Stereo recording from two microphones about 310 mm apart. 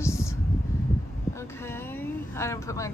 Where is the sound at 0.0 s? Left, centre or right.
Centre.